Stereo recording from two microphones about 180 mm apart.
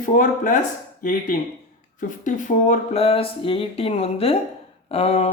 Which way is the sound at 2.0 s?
45° left (ahead or behind).